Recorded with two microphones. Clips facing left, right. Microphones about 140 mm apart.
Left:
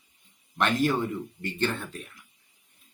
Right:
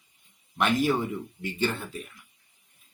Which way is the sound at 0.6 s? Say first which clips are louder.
Even; 5° right (ahead or behind).